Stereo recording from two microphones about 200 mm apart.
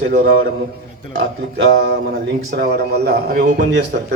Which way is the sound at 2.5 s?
55° right (ahead or behind).